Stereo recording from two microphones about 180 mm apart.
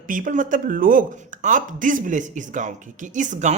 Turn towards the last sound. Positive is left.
turn(degrees=-40)  # may be behind; listen again after turning